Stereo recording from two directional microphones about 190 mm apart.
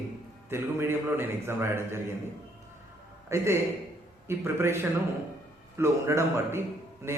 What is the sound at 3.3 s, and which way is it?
A man's voice, 15° right (ahead or behind).